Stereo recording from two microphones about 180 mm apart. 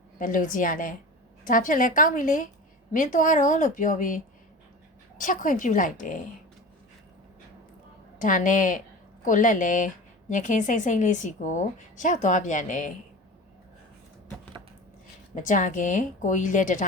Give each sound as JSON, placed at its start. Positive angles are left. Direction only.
{"t": 0.2, "sound": "a woman's voice", "side_deg": 45}
{"t": 8.2, "sound": "a woman's voice", "side_deg": 45}
{"t": 15.4, "sound": "a woman's voice", "side_deg": 45}